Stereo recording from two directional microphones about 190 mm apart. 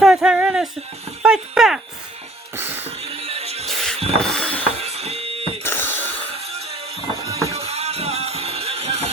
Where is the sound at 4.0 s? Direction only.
30° right (ahead or behind).